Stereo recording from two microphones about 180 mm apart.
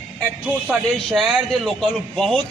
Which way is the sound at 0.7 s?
Centre (ahead or behind).